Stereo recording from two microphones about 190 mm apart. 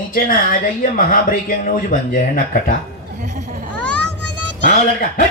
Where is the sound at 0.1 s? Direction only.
45° left (ahead or behind).